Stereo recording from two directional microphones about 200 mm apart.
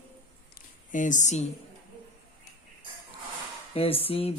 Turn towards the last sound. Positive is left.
turn(degrees=30)  # may be behind; listen again after turning